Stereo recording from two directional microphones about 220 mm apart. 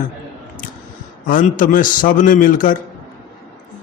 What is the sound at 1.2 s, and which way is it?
A man's voice, 40° left (ahead or behind).